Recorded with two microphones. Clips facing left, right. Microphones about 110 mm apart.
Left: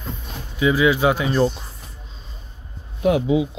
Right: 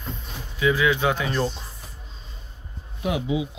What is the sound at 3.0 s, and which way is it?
Speech, 45° left (ahead or behind).